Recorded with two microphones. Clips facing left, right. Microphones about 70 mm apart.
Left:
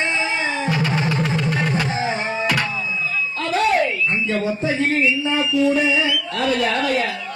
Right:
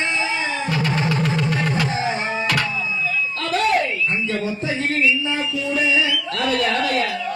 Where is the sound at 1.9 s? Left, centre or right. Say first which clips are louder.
Even; left.